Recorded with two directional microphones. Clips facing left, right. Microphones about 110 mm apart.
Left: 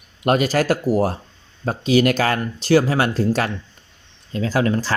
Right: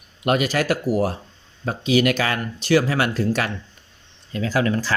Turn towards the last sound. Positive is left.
turn(degrees=30)  # may be behind; listen again after turning